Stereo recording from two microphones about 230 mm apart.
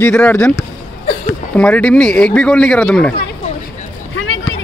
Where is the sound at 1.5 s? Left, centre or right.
Centre.